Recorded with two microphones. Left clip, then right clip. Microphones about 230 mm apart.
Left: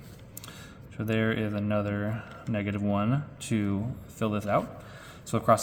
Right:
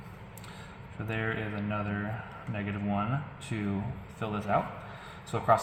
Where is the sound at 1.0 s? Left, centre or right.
Left.